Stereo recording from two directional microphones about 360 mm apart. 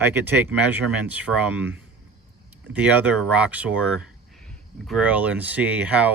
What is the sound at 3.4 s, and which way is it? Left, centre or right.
Speech, centre.